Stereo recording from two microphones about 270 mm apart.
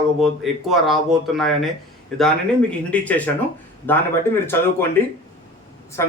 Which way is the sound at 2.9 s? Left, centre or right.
Centre.